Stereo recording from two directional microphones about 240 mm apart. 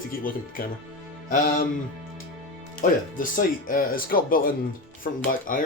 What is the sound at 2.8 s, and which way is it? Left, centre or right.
Speech, left.